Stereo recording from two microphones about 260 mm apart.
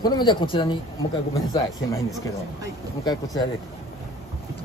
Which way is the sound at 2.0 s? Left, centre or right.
Centre.